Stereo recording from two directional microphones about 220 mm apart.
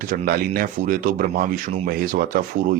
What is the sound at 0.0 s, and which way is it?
Speech, 40° right (ahead or behind).